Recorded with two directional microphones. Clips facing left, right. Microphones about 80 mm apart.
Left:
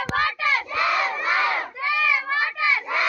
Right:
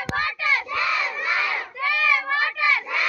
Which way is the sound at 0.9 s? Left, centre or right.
Left.